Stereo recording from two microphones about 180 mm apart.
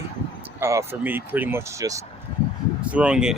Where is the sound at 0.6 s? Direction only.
15° right (ahead or behind).